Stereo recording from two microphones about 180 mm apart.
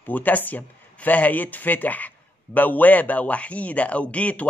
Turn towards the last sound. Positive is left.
turn(degrees=10)  # may be behind; listen again after turning